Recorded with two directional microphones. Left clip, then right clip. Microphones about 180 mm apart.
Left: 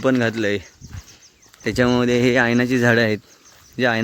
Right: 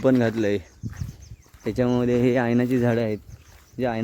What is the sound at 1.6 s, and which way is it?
Speech, 5° left (ahead or behind).